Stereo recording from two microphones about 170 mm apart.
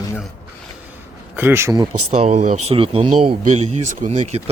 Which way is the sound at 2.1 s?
45° right (ahead or behind).